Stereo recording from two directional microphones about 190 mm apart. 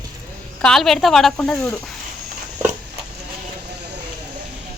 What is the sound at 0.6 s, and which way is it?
A woman's voice, centre (ahead or behind).